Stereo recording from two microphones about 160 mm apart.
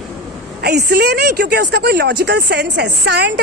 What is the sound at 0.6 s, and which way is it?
Speech, 80° right.